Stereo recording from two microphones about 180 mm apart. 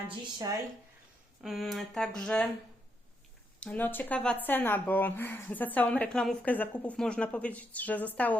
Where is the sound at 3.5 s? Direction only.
10° left (ahead or behind).